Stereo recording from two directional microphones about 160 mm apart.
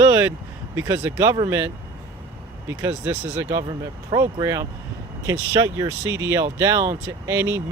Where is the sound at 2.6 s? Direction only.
15° right (ahead or behind).